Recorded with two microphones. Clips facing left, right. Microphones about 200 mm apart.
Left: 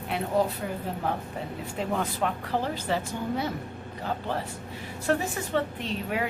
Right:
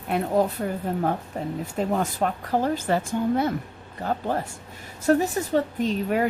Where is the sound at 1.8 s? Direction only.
45° right (ahead or behind).